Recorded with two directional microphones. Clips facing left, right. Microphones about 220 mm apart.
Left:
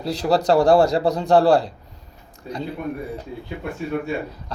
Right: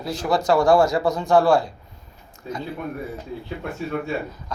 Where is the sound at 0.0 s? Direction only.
35° left (ahead or behind).